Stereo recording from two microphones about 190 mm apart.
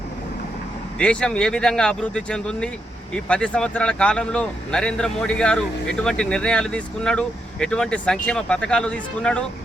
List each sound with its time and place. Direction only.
0.9 s speech: 5° left (ahead or behind)